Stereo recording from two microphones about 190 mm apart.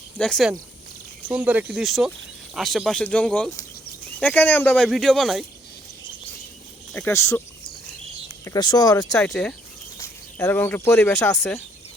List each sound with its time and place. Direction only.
0.2 s speech: centre (ahead or behind)
6.9 s speech: 15° left (ahead or behind)
8.4 s speech: 20° left (ahead or behind)
9.0 s speech: 5° left (ahead or behind)